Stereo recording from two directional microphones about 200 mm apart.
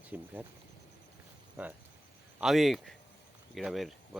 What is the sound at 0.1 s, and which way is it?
Speech, 10° right (ahead or behind).